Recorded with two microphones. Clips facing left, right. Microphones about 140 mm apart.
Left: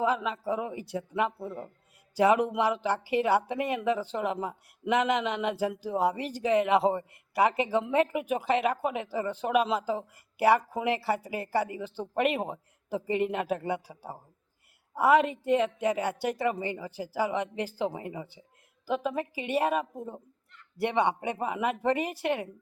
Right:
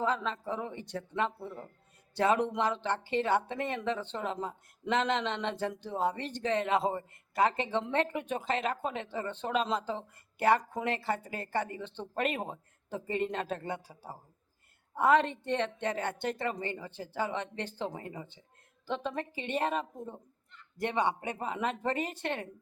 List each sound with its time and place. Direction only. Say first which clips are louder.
0.0 s speech: left 4 dB; 10° left (ahead or behind)